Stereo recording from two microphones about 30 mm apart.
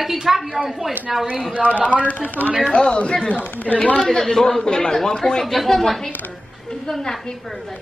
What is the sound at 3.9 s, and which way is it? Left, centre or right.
A woman's voice, centre.